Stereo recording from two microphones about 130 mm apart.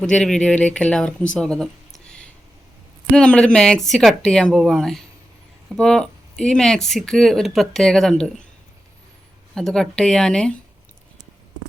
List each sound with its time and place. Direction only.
0.0 s speech: 5° left (ahead or behind)
9.6 s speech: 5° left (ahead or behind)